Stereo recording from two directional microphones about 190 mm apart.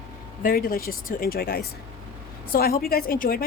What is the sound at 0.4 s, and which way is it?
A woman's voice, 50° left (ahead or behind).